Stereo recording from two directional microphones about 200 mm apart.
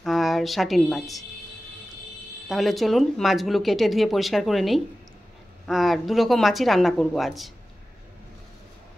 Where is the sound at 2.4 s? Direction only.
Centre (ahead or behind).